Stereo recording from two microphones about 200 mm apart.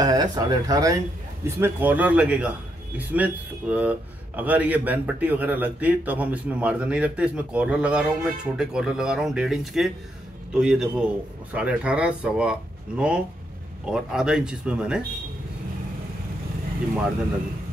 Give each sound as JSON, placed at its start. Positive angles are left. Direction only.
{"t": 0.0, "sound": "a man's voice", "side_deg": -20}